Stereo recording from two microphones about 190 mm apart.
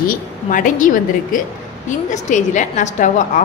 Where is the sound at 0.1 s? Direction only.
45° left (ahead or behind).